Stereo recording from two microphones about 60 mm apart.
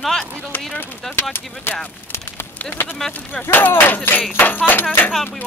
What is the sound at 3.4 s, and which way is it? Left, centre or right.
Speech, left.